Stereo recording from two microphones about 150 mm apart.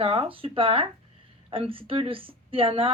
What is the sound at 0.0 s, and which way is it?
Speech, 40° right (ahead or behind).